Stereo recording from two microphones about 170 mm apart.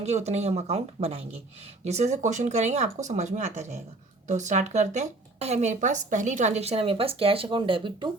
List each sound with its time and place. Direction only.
0.0 s a woman's voice: 40° right (ahead or behind)